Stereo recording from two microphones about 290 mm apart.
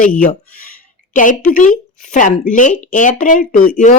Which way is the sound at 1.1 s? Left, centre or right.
Left.